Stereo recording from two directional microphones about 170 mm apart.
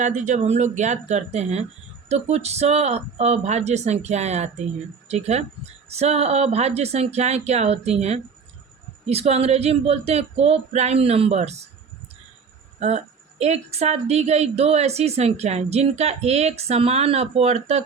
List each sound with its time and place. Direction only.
0.0 s a woman's voice: 45° right (ahead or behind)
12.8 s a woman's voice: 40° right (ahead or behind)